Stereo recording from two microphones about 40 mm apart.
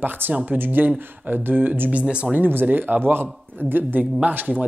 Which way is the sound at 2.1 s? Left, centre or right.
Right.